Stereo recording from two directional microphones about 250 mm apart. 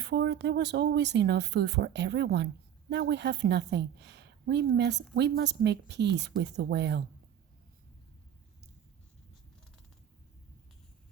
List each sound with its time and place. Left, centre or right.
0.0 s a woman's voice: right